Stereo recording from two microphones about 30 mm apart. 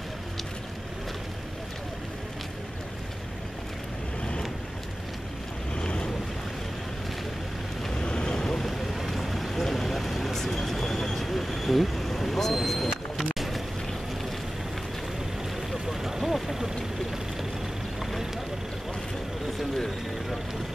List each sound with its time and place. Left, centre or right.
5.8 s boat: left
8.0 s vehicle: left
8.9 s vehicle: centre
12.9 s vehicle: centre
15.9 s vehicle: centre